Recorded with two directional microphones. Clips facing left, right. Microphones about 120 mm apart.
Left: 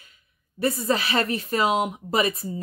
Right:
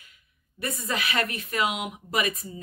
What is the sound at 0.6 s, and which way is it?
Speech, 30° left (ahead or behind).